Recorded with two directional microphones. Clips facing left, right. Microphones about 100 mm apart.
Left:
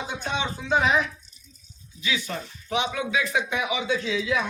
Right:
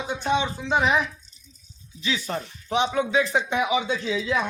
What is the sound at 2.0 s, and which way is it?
Speech, 30° right (ahead or behind).